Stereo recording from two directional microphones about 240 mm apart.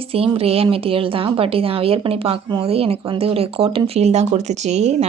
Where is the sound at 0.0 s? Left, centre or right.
Right.